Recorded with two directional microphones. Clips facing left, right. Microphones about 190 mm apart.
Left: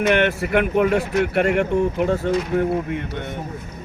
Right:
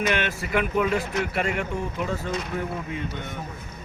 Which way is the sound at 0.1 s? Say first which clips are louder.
Left 7 dB; 60° left (ahead or behind).